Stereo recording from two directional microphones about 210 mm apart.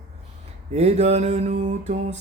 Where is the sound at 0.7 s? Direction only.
30° right (ahead or behind).